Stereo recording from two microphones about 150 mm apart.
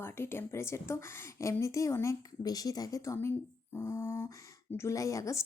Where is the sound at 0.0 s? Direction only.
15° left (ahead or behind).